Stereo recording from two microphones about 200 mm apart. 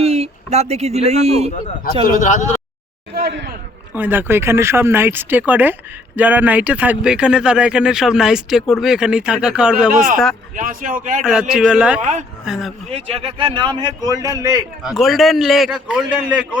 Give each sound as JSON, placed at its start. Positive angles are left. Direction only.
{"t": 0.0, "sound": "a man's voice", "side_deg": -30}
{"t": 2.1, "sound": "speech", "side_deg": 35}
{"t": 3.2, "sound": "speech", "side_deg": -60}
{"t": 3.9, "sound": "speech", "side_deg": -10}
{"t": 10.5, "sound": "speech", "side_deg": -40}
{"t": 11.2, "sound": "speech", "side_deg": -5}
{"t": 11.9, "sound": "speech", "side_deg": -35}
{"t": 12.5, "sound": "speech", "side_deg": 0}
{"t": 12.9, "sound": "a man's voice", "side_deg": -30}
{"t": 14.8, "sound": "speech", "side_deg": 0}